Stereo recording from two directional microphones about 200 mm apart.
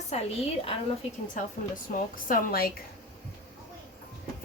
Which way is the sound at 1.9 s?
45° left (ahead or behind).